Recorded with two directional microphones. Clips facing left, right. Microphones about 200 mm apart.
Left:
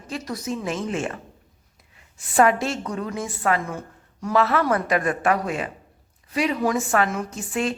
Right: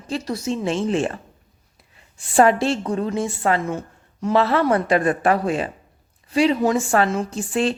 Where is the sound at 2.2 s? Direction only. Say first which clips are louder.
Right 3 dB; 30° right (ahead or behind).